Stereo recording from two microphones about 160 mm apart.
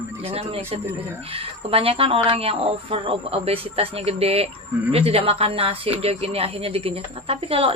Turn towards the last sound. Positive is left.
turn(degrees=-35)  # may be behind; listen again after turning